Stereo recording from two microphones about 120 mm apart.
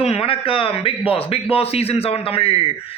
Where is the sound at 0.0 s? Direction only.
55° left (ahead or behind).